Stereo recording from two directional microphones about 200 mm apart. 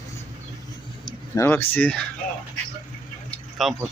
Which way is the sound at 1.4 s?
10° left (ahead or behind).